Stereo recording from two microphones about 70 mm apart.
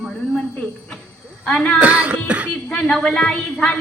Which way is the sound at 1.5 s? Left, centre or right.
Centre.